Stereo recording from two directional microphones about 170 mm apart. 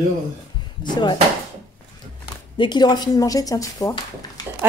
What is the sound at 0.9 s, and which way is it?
Speech, 25° left (ahead or behind).